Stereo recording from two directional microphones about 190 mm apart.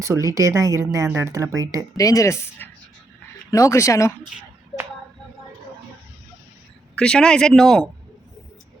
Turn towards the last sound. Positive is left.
turn(degrees=0)  # may be behind; listen again after turning